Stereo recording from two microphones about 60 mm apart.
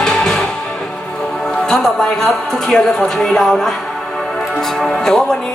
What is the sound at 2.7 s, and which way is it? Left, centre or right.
Speech, centre.